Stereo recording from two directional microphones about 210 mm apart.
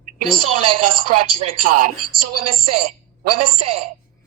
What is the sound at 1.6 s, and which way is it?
A woman's voice, 40° right (ahead or behind).